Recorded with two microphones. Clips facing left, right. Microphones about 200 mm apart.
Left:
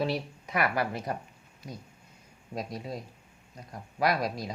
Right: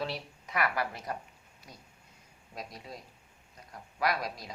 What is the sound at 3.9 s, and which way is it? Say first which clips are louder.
Speech: left 4 dB; 25° left (ahead or behind).